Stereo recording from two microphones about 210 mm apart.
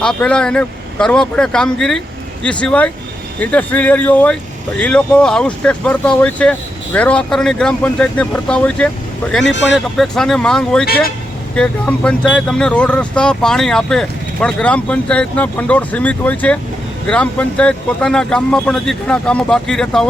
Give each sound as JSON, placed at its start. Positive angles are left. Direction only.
{"t": 0.0, "sound": "speech", "side_deg": 5}
{"t": 9.4, "sound": "speech", "side_deg": 60}
{"t": 9.7, "sound": "speech", "side_deg": 0}